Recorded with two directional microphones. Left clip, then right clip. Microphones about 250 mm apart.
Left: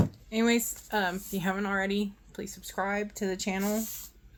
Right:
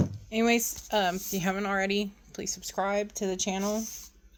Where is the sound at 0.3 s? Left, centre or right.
Right.